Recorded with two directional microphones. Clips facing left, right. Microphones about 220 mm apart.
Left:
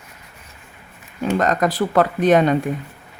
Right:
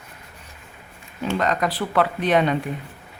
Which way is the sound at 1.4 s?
45° left (ahead or behind).